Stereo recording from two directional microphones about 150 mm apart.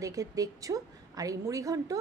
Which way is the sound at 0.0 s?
20° right (ahead or behind).